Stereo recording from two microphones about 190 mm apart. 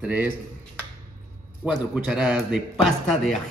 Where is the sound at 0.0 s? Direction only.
5° right (ahead or behind).